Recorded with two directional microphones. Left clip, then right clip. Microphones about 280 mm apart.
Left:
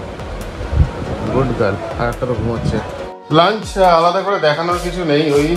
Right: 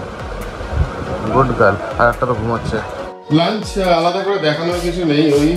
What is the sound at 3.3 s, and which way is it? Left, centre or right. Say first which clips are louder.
A man's voice: left 4 dB; centre.